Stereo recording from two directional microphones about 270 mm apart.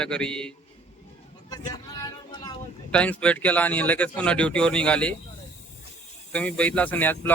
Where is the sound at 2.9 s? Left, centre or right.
Centre.